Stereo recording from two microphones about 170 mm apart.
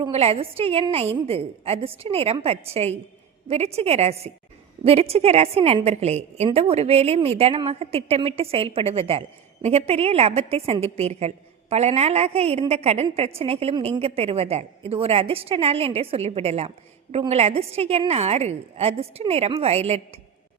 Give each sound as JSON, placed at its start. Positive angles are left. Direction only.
{"t": 0.1, "sound": "a woman's voice", "side_deg": -35}